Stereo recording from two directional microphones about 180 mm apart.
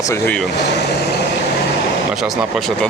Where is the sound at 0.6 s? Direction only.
70° left (ahead or behind).